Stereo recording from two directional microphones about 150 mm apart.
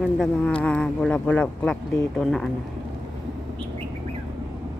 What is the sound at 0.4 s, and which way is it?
Speech, 10° left (ahead or behind).